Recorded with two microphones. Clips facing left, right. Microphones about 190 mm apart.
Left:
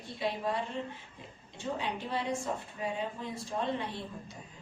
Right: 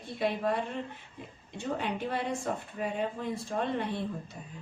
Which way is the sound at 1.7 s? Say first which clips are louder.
Right 3 dB; 55° right (ahead or behind).